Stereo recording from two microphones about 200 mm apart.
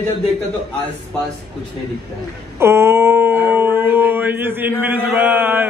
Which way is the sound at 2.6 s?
15° right (ahead or behind).